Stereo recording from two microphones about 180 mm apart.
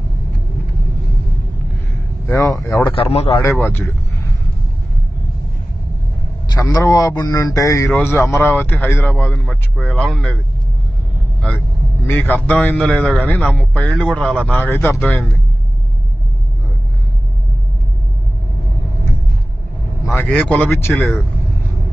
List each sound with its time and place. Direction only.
2.2 s a man's voice: 15° left (ahead or behind)
2.9 s a man's voice: 30° left (ahead or behind)
3.4 s speech: 10° left (ahead or behind)
6.5 s a man's voice: 15° left (ahead or behind)
12.1 s a man's voice: 10° left (ahead or behind)
20.2 s a man's voice: 10° left (ahead or behind)